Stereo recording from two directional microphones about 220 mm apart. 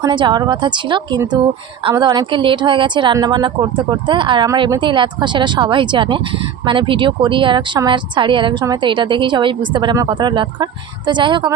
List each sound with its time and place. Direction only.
0.0 s speech: 20° right (ahead or behind)